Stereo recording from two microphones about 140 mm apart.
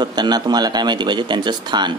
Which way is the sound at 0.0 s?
30° right (ahead or behind).